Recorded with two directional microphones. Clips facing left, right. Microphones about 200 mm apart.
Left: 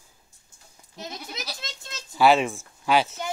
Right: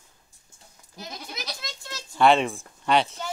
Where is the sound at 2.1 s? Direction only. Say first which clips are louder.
Even; 5° left (ahead or behind).